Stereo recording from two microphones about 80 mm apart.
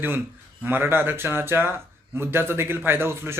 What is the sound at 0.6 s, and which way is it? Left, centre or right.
A man's voice, right.